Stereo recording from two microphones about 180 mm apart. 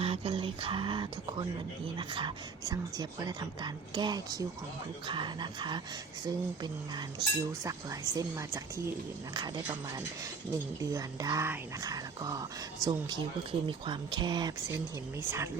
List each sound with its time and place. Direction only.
0.0 s a woman's voice: 30° right (ahead or behind); by 8.9 s 15° right (ahead or behind)
10.5 s speech: 20° right (ahead or behind)
15.2 s a woman's voice: 15° right (ahead or behind)